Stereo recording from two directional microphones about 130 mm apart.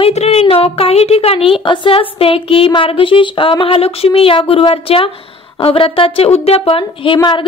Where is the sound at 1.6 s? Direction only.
40° left (ahead or behind).